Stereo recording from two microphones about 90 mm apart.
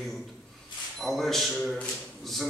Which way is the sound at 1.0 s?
5° left (ahead or behind).